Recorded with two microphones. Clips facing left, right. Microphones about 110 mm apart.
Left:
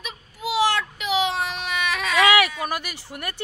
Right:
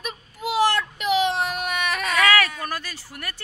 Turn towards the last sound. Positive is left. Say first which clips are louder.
# left 3 dB
turn(degrees=20)  # may be behind; listen again after turning